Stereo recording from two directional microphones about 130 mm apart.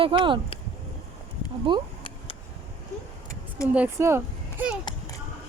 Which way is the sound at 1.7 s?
40° right (ahead or behind).